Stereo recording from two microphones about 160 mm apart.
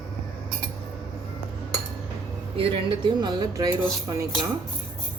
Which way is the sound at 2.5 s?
35° right (ahead or behind).